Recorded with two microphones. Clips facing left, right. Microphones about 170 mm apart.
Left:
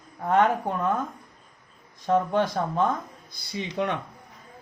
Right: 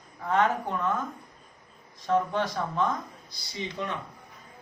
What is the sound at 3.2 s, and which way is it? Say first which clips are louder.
Speech: left 3 dB; 60° left (ahead or behind).